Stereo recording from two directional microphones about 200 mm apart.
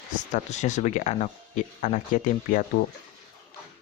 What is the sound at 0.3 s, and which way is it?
Speech, 35° left (ahead or behind).